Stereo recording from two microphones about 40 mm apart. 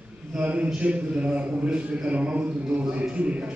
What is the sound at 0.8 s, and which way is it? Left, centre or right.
A man's voice, right.